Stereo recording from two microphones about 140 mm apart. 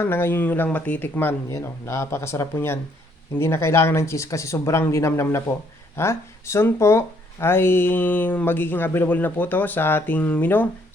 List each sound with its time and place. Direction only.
0.0 s speech: 15° left (ahead or behind)